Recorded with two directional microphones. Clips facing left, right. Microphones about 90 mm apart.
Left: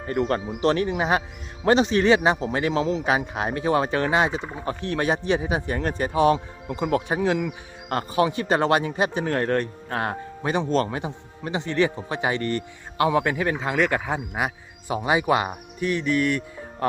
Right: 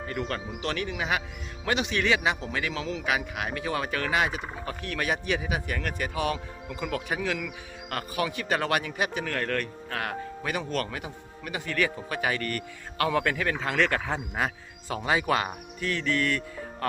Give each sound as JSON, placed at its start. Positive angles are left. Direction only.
{"t": 0.1, "sound": "a man's voice", "side_deg": 40}
{"t": 6.7, "sound": "speech", "side_deg": 45}
{"t": 7.1, "sound": "speech", "side_deg": 30}
{"t": 15.8, "sound": "music", "side_deg": 20}